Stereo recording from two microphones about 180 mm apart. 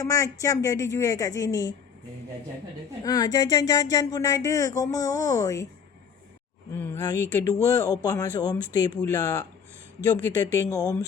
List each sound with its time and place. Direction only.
0.0 s speech: 20° left (ahead or behind)
3.0 s speech: 20° left (ahead or behind)
6.7 s speech: 10° left (ahead or behind)
10.2 s speech: 15° left (ahead or behind)